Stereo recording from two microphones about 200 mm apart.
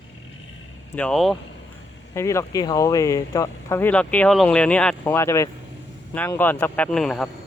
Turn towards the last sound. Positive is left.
turn(degrees=5)  # may be behind; listen again after turning